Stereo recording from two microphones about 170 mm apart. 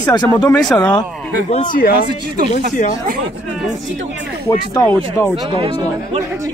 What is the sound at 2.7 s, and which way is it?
Speech, 50° left (ahead or behind).